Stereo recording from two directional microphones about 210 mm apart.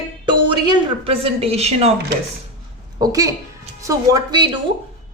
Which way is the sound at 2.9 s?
15° right (ahead or behind).